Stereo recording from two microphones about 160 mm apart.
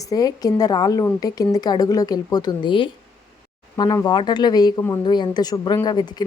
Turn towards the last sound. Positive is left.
turn(degrees=25)  # may be behind; listen again after turning